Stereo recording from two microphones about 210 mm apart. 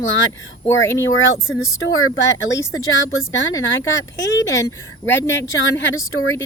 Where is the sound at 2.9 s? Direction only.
60° left (ahead or behind).